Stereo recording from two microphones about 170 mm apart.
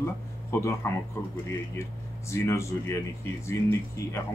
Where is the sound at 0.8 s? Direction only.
15° left (ahead or behind).